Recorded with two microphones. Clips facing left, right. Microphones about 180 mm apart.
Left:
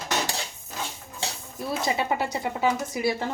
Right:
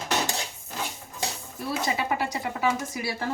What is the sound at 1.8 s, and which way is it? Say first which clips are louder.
A woman's voice: left 2 dB; 25° left (ahead or behind).